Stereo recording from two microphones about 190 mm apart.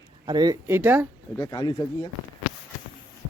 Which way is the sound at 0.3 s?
20° right (ahead or behind).